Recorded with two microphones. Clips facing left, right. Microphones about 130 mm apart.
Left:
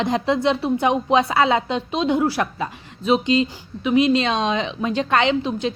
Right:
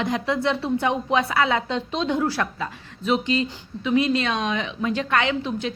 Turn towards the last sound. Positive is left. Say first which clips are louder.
# left 4 dB
turn(degrees=20)  # may be behind; listen again after turning